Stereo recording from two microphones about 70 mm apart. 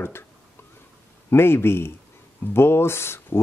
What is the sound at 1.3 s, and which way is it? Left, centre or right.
Speech, left.